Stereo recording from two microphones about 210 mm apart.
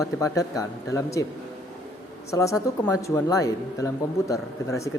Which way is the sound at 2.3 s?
15° left (ahead or behind).